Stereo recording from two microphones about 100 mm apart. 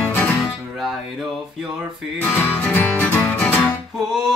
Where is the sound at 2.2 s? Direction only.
20° left (ahead or behind).